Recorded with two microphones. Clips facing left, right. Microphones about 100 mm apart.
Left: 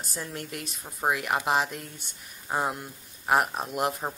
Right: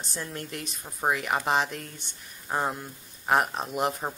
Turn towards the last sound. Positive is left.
turn(degrees=0)  # may be behind; listen again after turning